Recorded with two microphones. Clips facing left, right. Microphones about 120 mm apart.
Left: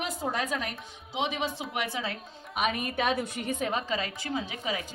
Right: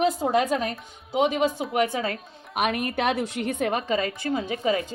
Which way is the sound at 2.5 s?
70° right (ahead or behind).